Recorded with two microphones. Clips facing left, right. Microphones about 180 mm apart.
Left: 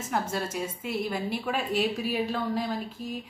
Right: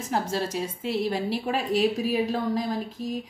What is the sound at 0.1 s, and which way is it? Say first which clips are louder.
A woman's voice: right 3 dB; 30° right (ahead or behind).